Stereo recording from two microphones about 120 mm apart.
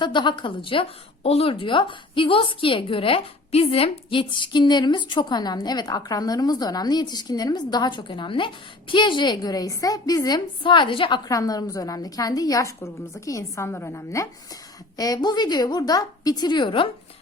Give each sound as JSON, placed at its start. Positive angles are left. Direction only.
{"t": 0.0, "sound": "a woman's voice", "side_deg": 40}
{"t": 11.3, "sound": "a woman's voice", "side_deg": 30}